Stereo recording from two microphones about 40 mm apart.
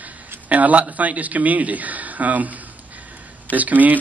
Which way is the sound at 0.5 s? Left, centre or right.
Right.